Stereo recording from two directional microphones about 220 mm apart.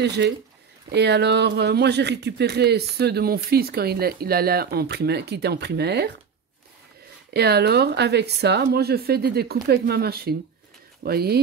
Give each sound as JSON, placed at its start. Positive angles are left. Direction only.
{"t": 0.0, "sound": "speech", "side_deg": -50}
{"t": 7.3, "sound": "speech", "side_deg": -45}